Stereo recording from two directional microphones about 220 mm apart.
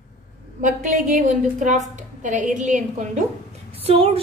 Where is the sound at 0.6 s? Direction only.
35° right (ahead or behind).